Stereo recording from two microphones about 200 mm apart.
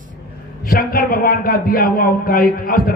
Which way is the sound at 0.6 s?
45° left (ahead or behind).